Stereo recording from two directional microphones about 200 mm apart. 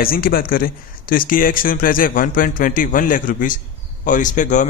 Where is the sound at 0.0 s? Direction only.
45° left (ahead or behind).